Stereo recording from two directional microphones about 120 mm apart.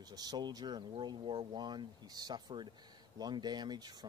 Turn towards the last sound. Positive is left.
turn(degrees=-35)  # may be behind; listen again after turning